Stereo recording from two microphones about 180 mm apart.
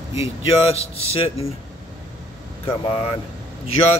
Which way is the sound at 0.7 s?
35° left (ahead or behind).